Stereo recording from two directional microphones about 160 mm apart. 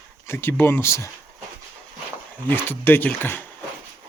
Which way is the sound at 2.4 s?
10° left (ahead or behind).